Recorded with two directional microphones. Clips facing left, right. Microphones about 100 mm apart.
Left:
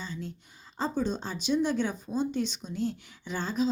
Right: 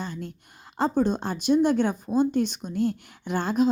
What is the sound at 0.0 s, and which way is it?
Speech, 55° right (ahead or behind).